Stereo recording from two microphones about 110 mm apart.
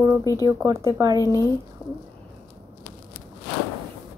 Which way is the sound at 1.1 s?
30° left (ahead or behind).